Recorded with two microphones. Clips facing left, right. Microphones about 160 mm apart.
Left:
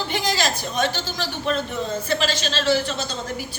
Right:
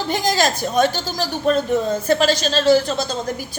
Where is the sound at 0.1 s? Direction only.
45° right (ahead or behind).